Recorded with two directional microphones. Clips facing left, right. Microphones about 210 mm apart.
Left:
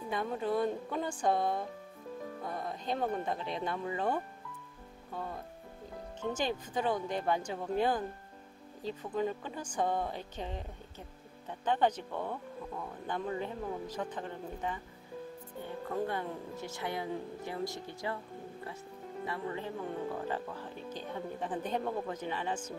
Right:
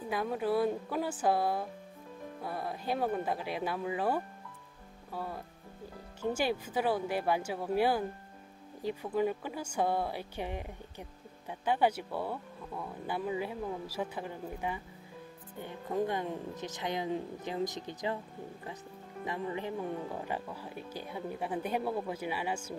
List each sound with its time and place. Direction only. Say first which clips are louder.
0.1 s speech: right 2 dB; 5° right (ahead or behind)
6.3 s speech: right 2 dB; 10° right (ahead or behind)
19.2 s speech: right 2 dB; 15° right (ahead or behind)